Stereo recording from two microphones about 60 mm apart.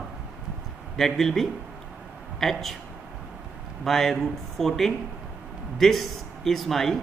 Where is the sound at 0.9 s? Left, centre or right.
Centre.